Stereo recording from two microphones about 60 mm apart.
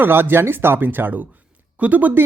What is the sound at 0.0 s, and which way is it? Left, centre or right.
Speech, right.